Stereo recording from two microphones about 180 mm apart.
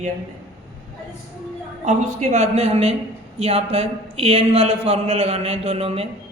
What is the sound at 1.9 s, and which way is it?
A man's voice, 40° right (ahead or behind).